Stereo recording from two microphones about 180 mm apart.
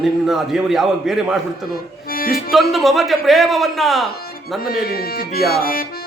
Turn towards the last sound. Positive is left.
turn(degrees=55)  # may be behind; listen again after turning